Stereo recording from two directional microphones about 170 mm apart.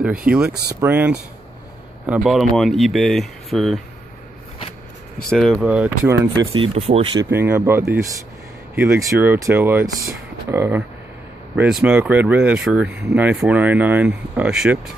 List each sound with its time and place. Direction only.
0.7 s speech: 10° right (ahead or behind)
5.3 s speech: centre (ahead or behind)
6.3 s speech: 30° right (ahead or behind)
7.2 s speech: 10° right (ahead or behind)